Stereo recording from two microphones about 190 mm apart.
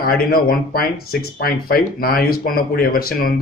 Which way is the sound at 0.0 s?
50° left (ahead or behind).